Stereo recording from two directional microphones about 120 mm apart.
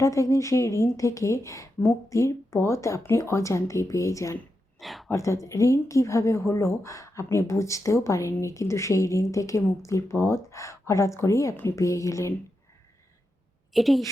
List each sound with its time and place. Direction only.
0.0 s a woman's voice: 25° left (ahead or behind)
4.8 s a woman's voice: centre (ahead or behind)
5.1 s a woman's voice: 25° left (ahead or behind)
13.7 s a woman's voice: centre (ahead or behind)